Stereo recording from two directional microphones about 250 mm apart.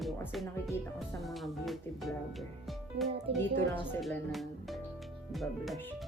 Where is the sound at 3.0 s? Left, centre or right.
Right.